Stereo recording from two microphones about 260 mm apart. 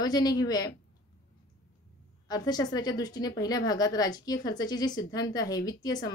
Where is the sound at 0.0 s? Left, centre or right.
Centre.